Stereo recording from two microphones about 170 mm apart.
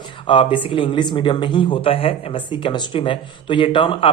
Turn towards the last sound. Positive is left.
turn(degrees=30)  # may be behind; listen again after turning